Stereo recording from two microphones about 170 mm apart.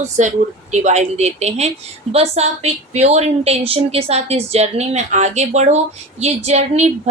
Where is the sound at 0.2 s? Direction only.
45° right (ahead or behind).